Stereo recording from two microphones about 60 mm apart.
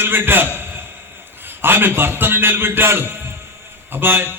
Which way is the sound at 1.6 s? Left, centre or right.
Right.